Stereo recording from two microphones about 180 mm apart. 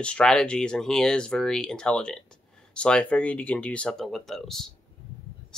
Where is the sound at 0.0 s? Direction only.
5° left (ahead or behind).